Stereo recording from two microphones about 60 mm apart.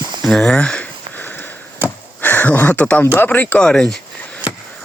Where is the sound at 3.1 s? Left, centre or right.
Left.